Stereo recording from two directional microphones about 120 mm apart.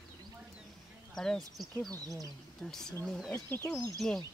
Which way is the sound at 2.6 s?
5° left (ahead or behind).